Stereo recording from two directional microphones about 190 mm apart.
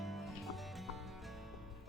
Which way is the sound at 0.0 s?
Centre (ahead or behind).